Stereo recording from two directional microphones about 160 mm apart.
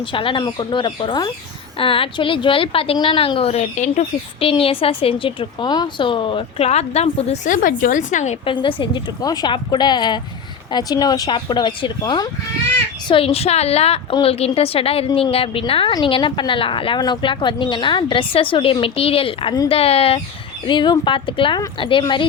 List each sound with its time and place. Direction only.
0.0 s a woman's voice: 30° left (ahead or behind); by 8.4 s 50° left (ahead or behind)
8.4 s a woman's voice: 30° left (ahead or behind)